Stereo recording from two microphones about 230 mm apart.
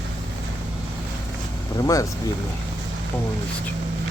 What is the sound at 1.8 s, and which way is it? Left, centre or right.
Speech, centre.